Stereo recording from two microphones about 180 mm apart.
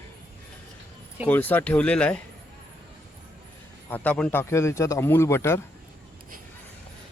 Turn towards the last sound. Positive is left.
turn(degrees=15)  # may be behind; listen again after turning